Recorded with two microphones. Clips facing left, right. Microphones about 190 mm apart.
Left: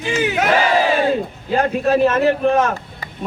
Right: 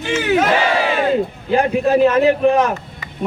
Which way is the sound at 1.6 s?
15° right (ahead or behind).